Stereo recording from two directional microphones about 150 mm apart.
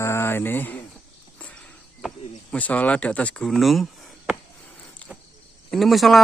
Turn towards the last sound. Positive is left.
turn(degrees=0)  # may be behind; listen again after turning